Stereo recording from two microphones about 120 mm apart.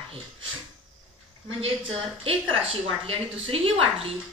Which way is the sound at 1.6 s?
50° right (ahead or behind).